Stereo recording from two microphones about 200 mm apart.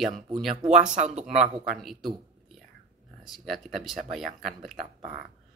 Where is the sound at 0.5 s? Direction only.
35° right (ahead or behind).